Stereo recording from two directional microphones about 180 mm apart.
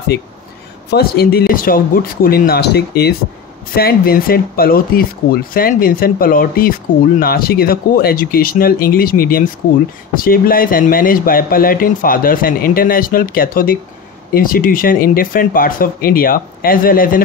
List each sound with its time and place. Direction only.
0.8 s speech: 60° left (ahead or behind)